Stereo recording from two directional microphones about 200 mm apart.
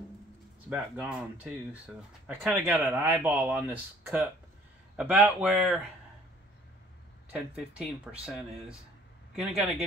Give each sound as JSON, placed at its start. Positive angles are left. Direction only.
{"t": 0.7, "sound": "speech", "side_deg": -5}
{"t": 7.3, "sound": "speech", "side_deg": -5}